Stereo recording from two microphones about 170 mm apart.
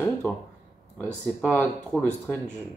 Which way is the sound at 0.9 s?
10° left (ahead or behind).